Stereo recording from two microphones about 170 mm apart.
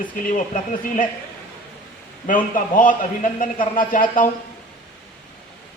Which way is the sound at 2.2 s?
50° left (ahead or behind).